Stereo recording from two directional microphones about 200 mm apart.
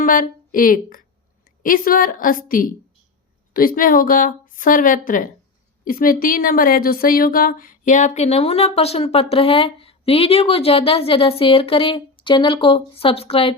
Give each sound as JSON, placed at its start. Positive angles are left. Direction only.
{"t": 0.0, "sound": "a woman's voice", "side_deg": 45}